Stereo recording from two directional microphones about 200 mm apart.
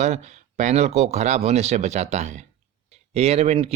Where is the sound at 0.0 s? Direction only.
35° right (ahead or behind).